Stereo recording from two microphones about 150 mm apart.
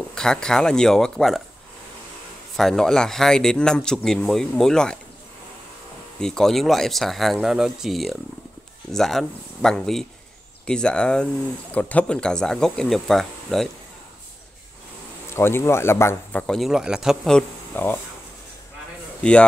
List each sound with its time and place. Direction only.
0.1 s speech: 5° left (ahead or behind)
2.5 s speech: centre (ahead or behind)
6.1 s speech: 5° left (ahead or behind)
15.3 s speech: 15° left (ahead or behind)
16.4 s speech: centre (ahead or behind)